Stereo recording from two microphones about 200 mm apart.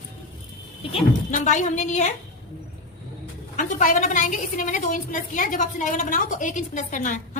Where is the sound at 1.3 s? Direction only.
40° left (ahead or behind).